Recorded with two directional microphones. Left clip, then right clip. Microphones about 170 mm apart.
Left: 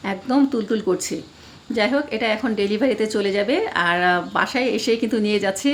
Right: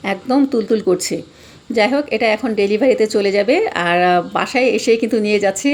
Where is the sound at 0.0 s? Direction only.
15° right (ahead or behind).